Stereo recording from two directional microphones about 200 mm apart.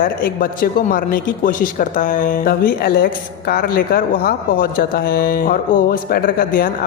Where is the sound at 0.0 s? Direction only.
45° left (ahead or behind).